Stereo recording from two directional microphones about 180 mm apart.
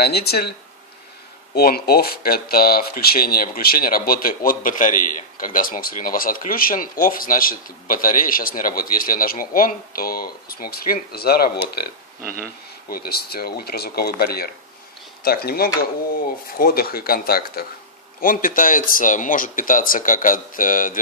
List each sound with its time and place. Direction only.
0.0 s speech: 65° left (ahead or behind)
1.5 s speech: 60° left (ahead or behind)
12.9 s speech: 60° left (ahead or behind)